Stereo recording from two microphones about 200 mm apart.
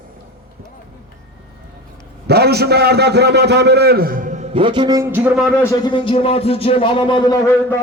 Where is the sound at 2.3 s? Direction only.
55° right (ahead or behind); by 5.7 s 5° left (ahead or behind).